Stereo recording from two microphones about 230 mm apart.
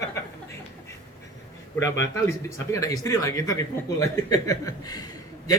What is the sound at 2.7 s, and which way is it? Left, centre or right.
Speech, centre.